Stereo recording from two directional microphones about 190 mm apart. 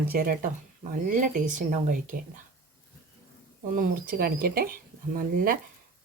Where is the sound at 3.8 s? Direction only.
50° right (ahead or behind).